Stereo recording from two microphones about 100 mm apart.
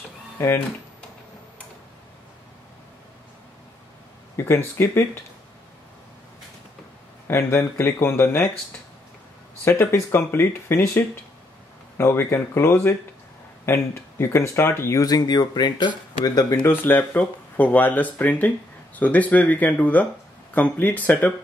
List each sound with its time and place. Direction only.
0.4 s speech: 20° left (ahead or behind)
4.5 s speech: 25° left (ahead or behind)
7.2 s speech: 25° left (ahead or behind)
9.7 s speech: 25° left (ahead or behind)
15.0 s speech: 40° left (ahead or behind)
16.6 s speech: 20° left (ahead or behind)